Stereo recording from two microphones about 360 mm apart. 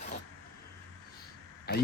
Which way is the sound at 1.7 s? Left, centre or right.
Left.